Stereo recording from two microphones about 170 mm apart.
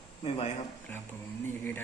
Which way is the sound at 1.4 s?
10° left (ahead or behind).